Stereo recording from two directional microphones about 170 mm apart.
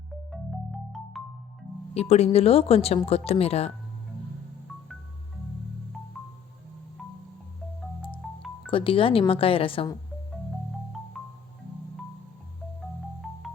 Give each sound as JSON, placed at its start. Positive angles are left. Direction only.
{"t": 1.2, "sound": "music", "side_deg": 0}
{"t": 1.9, "sound": "speech", "side_deg": 40}
{"t": 8.2, "sound": "music", "side_deg": 0}
{"t": 8.7, "sound": "speech", "side_deg": 30}